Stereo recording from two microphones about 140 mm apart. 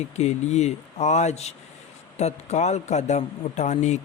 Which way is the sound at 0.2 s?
50° left (ahead or behind).